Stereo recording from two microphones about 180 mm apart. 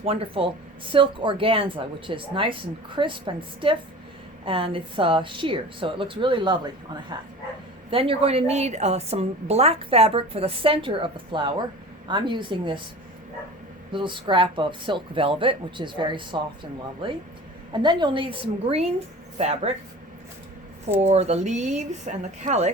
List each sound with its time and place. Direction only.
0.0 s a woman's voice: 30° right (ahead or behind)
13.9 s speech: 25° right (ahead or behind)
21.1 s a woman's voice: 35° right (ahead or behind)